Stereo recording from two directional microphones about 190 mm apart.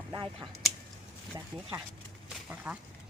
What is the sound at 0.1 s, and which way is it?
Speech, 25° right (ahead or behind).